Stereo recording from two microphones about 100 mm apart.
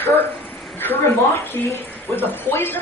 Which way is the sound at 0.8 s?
20° left (ahead or behind).